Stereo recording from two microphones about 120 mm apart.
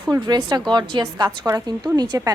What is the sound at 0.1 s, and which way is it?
A woman's voice, 35° right (ahead or behind).